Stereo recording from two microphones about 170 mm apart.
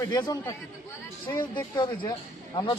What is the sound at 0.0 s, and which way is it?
Speech, 25° left (ahead or behind).